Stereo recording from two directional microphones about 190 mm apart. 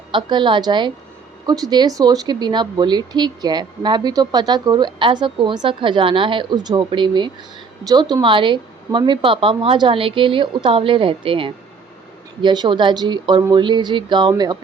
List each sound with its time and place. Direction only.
0.1 s a woman's voice: 25° right (ahead or behind)